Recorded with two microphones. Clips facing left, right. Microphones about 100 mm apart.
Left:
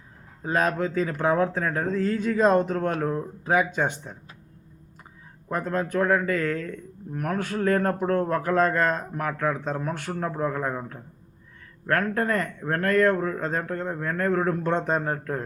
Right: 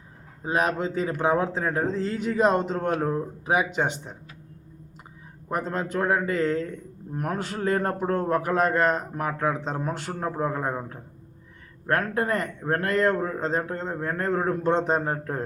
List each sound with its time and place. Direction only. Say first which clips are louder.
0.4 s a man's voice: left 1 dB; 20° right (ahead or behind)
5.5 s a man's voice: left 1 dB; 20° right (ahead or behind)